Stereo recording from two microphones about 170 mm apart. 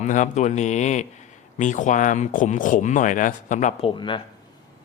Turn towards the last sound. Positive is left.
turn(degrees=30)  # may be behind; listen again after turning